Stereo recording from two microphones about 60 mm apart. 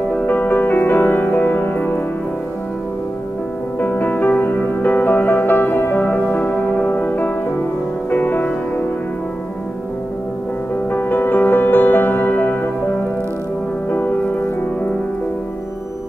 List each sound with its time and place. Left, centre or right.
0.3 s music: left
3.8 s music: left
10.9 s music: left
13.8 s music: left